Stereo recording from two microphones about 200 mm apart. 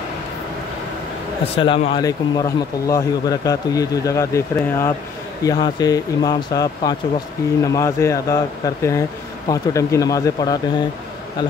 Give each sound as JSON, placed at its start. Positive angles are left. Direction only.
{"t": 1.4, "sound": "speech", "side_deg": 30}